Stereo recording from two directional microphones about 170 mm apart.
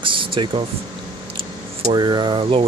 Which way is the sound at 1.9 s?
25° right (ahead or behind).